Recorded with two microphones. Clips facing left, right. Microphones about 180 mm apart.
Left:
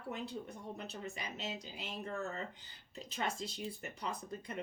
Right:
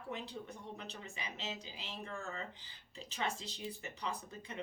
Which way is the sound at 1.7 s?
45° left (ahead or behind).